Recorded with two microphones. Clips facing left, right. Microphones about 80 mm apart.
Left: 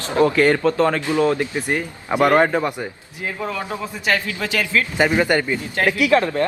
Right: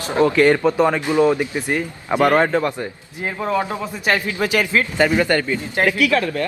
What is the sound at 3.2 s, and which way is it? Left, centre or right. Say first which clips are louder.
A man's voice: right 5 dB; right.